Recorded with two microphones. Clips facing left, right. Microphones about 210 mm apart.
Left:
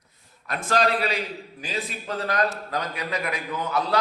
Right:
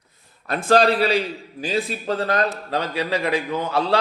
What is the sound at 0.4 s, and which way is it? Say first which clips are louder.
A man's voice: right 7 dB; 30° right (ahead or behind).